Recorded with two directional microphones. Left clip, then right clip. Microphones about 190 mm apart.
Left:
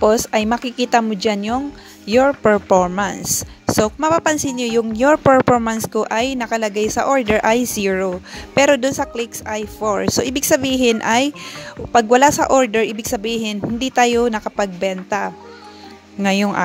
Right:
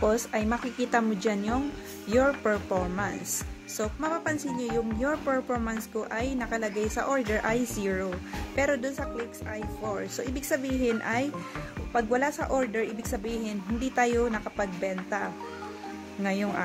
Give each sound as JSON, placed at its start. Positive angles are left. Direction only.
{"t": 0.0, "sound": "speech", "side_deg": 40}